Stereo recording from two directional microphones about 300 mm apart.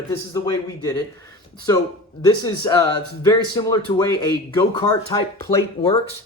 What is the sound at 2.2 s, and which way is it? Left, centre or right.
Speech, centre.